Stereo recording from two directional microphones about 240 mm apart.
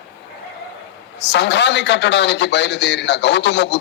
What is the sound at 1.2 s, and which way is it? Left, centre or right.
A man's voice, left.